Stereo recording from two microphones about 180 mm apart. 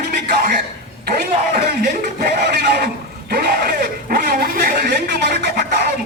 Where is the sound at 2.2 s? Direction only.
65° right (ahead or behind).